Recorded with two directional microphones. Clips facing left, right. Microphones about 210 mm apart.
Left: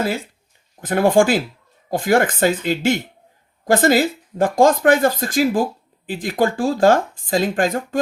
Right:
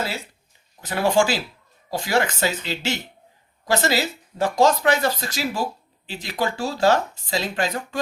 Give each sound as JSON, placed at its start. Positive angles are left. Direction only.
{"t": 0.8, "sound": "speech", "side_deg": 50}